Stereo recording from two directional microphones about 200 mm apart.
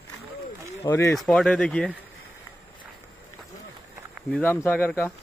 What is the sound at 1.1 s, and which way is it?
Speech, centre (ahead or behind).